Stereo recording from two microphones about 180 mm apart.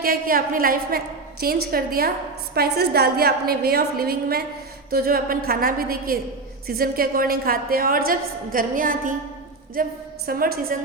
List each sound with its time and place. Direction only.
0.0 s a woman's voice: 55° right (ahead or behind)